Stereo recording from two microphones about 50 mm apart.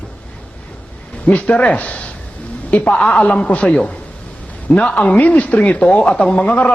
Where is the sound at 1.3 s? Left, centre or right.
Left.